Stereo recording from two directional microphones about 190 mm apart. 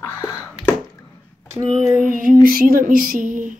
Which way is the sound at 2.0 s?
45° right (ahead or behind).